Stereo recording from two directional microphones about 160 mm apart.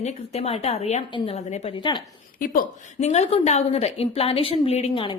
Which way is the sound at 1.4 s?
50° left (ahead or behind).